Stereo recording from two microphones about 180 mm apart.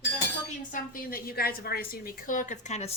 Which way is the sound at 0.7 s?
55° left (ahead or behind).